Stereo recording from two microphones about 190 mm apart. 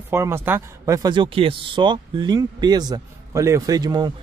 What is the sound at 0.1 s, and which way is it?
Speech, 15° right (ahead or behind).